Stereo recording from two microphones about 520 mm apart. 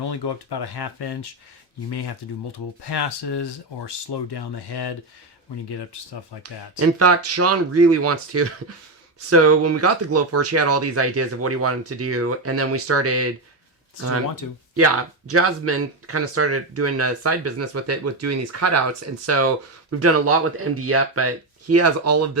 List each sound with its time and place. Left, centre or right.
0.1 s speech: left
6.7 s speech: right
14.4 s speech: left
15.3 s speech: right